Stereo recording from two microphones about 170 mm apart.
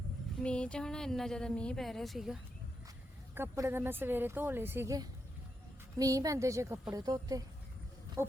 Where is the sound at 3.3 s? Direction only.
15° right (ahead or behind).